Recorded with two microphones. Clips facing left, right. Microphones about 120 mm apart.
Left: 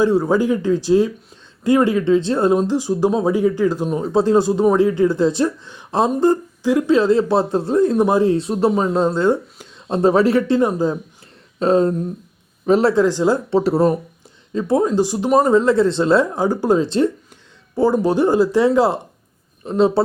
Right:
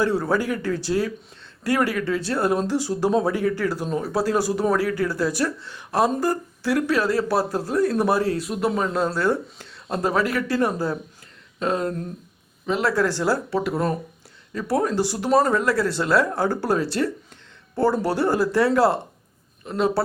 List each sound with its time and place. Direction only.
0.0 s speech: 15° left (ahead or behind)
11.6 s speech: 30° left (ahead or behind)
12.6 s speech: 40° left (ahead or behind)
12.9 s speech: 20° left (ahead or behind)